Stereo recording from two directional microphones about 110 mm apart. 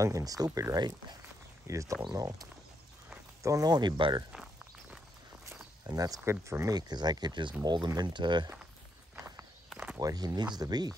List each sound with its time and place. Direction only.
0.0 s speech: 30° right (ahead or behind)
1.7 s speech: 30° right (ahead or behind)
3.4 s speech: 35° right (ahead or behind)
5.4 s walk: 20° right (ahead or behind)
5.9 s speech: 35° right (ahead or behind)
9.1 s walk: 25° right (ahead or behind)
9.9 s speech: 35° right (ahead or behind)